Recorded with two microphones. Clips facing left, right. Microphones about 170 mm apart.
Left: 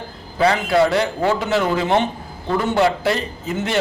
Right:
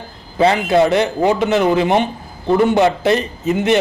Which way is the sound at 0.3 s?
20° right (ahead or behind).